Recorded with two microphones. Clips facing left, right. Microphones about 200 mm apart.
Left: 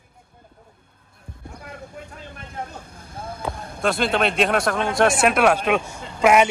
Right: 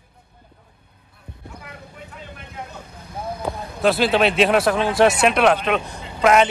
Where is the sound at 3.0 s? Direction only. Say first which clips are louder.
Right 5 dB; 50° left (ahead or behind).